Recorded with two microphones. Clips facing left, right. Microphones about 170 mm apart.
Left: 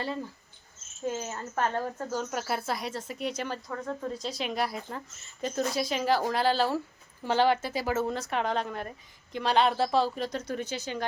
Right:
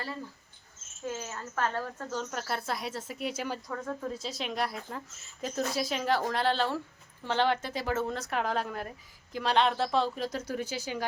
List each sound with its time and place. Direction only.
1.0 s a woman's voice: 20° left (ahead or behind)
2.0 s a woman's voice: 5° left (ahead or behind)
3.7 s a woman's voice: 5° left (ahead or behind)